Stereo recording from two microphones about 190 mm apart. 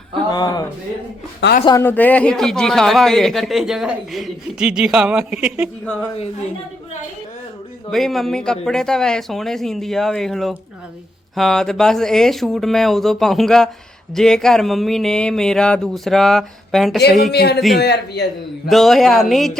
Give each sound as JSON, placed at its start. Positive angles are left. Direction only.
{"t": 0.3, "sound": "speech", "side_deg": 20}
{"t": 1.4, "sound": "speech", "side_deg": 70}
{"t": 1.8, "sound": "a man's voice", "side_deg": 10}
{"t": 7.9, "sound": "a man's voice", "side_deg": 0}
{"t": 17.0, "sound": "a man's voice", "side_deg": 55}
{"t": 18.7, "sound": "a man's voice", "side_deg": 0}